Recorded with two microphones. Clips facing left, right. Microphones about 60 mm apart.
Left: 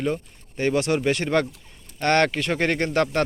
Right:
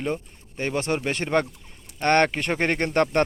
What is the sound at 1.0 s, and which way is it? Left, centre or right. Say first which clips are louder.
Speech: left 2 dB; centre.